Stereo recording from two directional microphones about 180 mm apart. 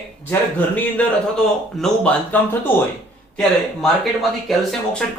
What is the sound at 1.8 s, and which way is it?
Speech, 10° left (ahead or behind).